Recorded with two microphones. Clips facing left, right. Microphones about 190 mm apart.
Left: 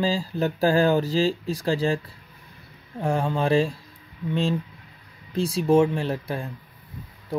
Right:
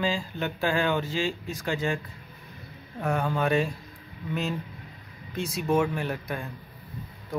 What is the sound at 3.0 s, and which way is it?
Speech, 30° left (ahead or behind).